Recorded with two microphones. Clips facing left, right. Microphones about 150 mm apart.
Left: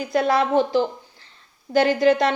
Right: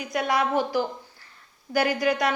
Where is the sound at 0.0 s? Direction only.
30° left (ahead or behind).